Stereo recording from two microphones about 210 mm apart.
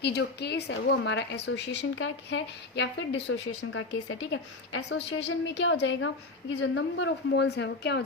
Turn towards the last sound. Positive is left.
turn(degrees=55)  # may be behind; listen again after turning